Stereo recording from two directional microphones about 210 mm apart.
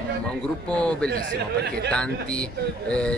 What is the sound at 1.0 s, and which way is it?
Speech, 50° right (ahead or behind).